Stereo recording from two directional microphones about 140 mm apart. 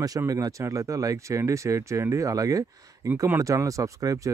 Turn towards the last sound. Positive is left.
turn(degrees=-25)  # may be behind; listen again after turning